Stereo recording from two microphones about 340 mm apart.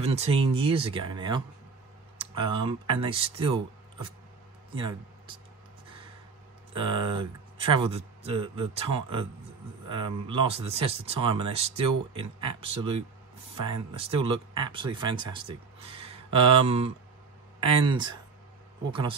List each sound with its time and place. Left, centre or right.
0.0 s speech: centre
4.7 s speech: centre
6.7 s speech: centre